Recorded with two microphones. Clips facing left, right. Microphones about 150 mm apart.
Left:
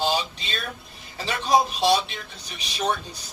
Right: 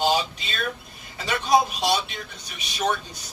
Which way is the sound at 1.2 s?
35° left (ahead or behind).